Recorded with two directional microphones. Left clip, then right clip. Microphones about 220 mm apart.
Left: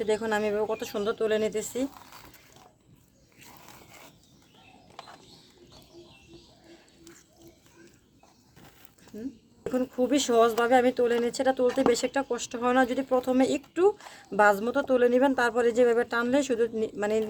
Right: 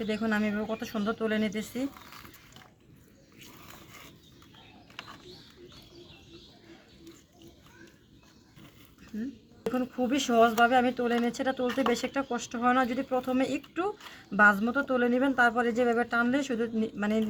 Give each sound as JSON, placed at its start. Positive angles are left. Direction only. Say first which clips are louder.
{"t": 0.1, "sound": "speech", "louder": "left 4 dB", "side_deg": 50}
{"t": 9.7, "sound": "speech", "louder": "left 5 dB", "side_deg": 50}